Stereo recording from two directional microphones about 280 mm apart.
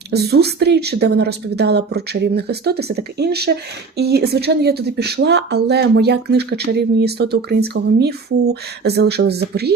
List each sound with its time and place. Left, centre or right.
0.1 s speech: right